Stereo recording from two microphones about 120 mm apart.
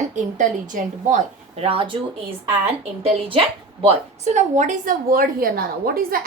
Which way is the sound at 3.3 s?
50° right (ahead or behind).